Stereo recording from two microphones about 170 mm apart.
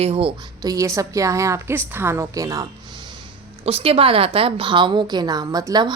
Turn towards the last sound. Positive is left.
turn(degrees=-25)  # may be behind; listen again after turning